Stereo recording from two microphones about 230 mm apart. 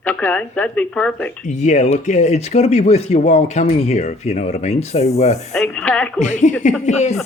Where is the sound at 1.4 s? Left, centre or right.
Left.